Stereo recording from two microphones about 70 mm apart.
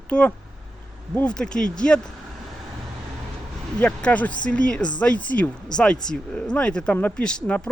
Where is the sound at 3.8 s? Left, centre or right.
Centre.